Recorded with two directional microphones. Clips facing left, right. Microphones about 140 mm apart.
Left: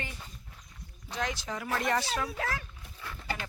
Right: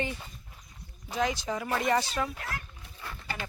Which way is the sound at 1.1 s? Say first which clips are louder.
Right 5 dB; centre (ahead or behind).